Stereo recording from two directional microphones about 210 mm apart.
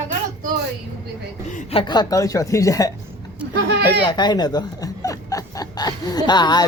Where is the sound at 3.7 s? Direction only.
55° right (ahead or behind).